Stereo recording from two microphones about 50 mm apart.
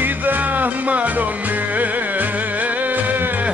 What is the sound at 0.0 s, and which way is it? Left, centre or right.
Music, right.